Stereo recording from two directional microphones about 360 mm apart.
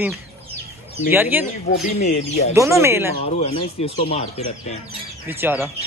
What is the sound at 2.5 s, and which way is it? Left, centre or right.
Speech, centre.